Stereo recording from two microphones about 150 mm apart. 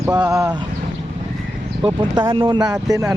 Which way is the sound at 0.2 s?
20° right (ahead or behind).